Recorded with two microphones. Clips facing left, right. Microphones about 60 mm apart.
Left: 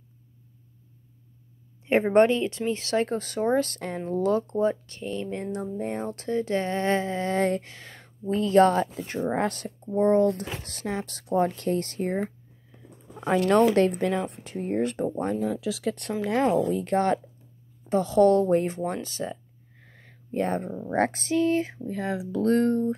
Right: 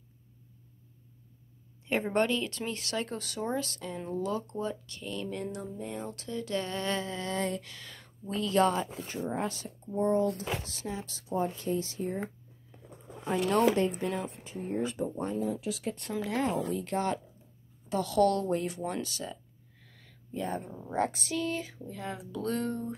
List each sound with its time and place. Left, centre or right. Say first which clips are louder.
1.9 s speech: left 9 dB; left
7.7 s speech: left 3 dB; left
8.9 s speech: left 7 dB; left
13.7 s speech: left 7 dB; left
15.9 s speech: left 7 dB; left
17.8 s speech: left 6 dB; left
19.9 s a sound: left 5 dB; left
20.2 s speech: left 8 dB; left
21.2 s speech: left 9 dB; left
21.8 s speech: left 9 dB; left
22.3 s speech: left 11 dB; left